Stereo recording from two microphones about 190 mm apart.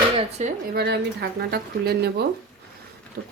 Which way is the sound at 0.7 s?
60° right (ahead or behind).